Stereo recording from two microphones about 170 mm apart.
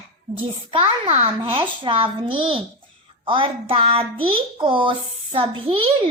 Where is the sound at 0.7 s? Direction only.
30° right (ahead or behind).